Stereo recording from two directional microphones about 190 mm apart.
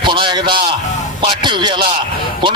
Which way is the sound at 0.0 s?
25° right (ahead or behind).